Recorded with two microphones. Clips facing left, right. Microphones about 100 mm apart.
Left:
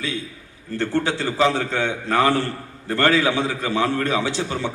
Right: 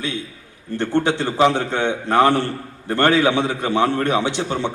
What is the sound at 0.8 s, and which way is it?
A man's voice, 20° right (ahead or behind).